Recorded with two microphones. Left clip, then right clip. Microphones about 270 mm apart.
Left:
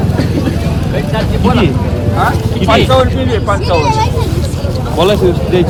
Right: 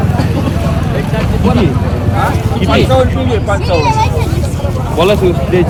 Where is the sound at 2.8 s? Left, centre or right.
Centre.